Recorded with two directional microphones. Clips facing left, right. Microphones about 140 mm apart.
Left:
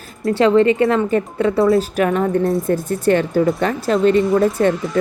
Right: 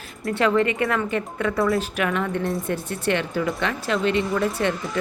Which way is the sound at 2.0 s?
40° left (ahead or behind).